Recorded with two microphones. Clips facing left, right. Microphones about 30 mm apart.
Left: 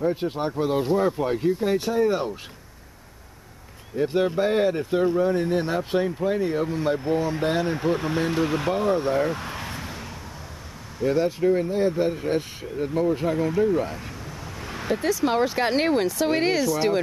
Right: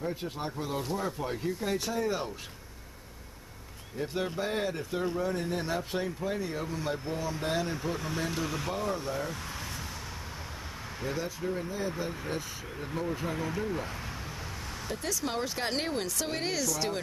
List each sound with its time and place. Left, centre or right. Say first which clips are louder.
0.0 s speech: left 10 dB; left
3.9 s speech: left 11 dB; left
11.1 s speech: left 14 dB; left
12.7 s speech: left 12 dB; centre
14.7 s a sound: left 13 dB; left
15.0 s speech: left 11 dB; left